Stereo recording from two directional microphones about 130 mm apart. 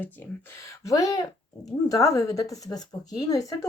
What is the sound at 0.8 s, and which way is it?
Speech, 25° left (ahead or behind).